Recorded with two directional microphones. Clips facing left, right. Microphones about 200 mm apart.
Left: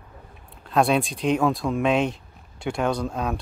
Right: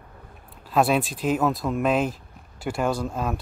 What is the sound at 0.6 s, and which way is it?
Speech, 5° right (ahead or behind).